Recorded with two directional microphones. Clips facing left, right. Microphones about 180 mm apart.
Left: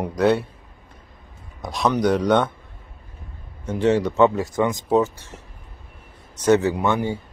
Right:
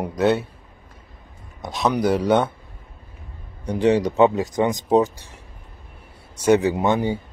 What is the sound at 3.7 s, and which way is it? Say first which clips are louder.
Speech: right 1 dB; 15° right (ahead or behind).